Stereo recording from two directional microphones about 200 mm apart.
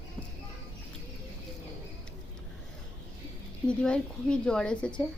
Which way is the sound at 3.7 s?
5° left (ahead or behind).